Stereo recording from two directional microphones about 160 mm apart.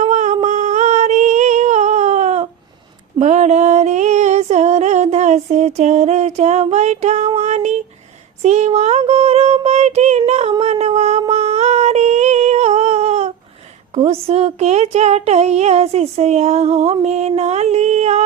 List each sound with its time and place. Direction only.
0.0 s humming: 45° right (ahead or behind)
0.4 s a sound: 45° right (ahead or behind)
3.2 s music: 45° right (ahead or behind)
8.4 s child singing: 45° right (ahead or behind)
13.9 s speech: 40° right (ahead or behind)